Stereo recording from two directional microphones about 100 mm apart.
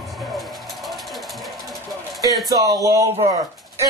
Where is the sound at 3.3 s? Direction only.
40° right (ahead or behind).